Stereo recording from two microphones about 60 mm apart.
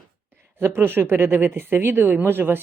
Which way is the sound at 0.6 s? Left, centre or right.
Right.